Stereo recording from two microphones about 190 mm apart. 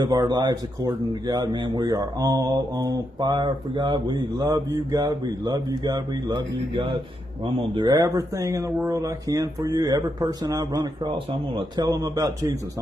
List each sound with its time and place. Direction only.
0.0 s speech: 20° right (ahead or behind)